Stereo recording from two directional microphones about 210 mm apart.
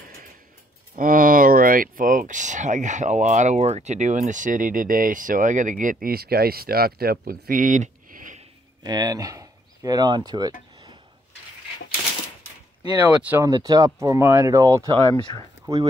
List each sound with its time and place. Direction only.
0.9 s speech: 40° right (ahead or behind)
8.8 s speech: 20° right (ahead or behind)
13.3 s speech: 15° right (ahead or behind)